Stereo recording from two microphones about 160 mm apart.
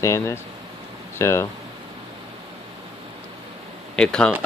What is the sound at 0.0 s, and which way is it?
Speech, 15° left (ahead or behind).